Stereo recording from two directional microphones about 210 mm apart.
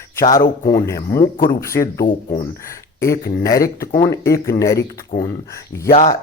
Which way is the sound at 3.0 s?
15° left (ahead or behind).